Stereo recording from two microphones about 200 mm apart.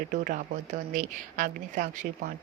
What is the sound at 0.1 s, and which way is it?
Speech, 40° right (ahead or behind).